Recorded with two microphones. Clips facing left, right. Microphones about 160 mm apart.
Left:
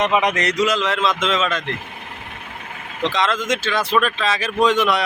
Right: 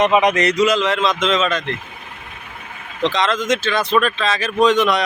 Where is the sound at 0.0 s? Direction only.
15° right (ahead or behind).